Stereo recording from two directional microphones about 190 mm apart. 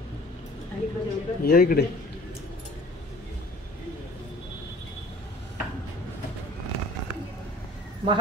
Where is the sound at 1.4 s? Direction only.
50° left (ahead or behind).